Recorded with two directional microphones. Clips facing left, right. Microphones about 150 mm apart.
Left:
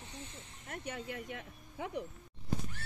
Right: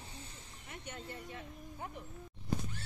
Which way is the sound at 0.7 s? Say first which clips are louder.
Left 5 dB; 75° left (ahead or behind).